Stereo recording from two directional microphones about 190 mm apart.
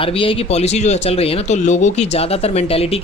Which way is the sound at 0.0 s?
30° left (ahead or behind).